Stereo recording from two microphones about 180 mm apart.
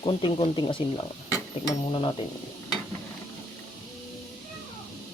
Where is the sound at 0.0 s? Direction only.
25° left (ahead or behind).